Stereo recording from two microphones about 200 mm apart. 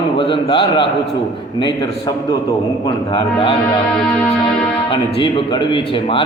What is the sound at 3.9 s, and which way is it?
Music, 5° left (ahead or behind).